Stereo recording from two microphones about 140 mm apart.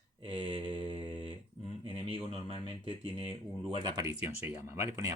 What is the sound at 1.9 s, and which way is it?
Speech, 40° right (ahead or behind).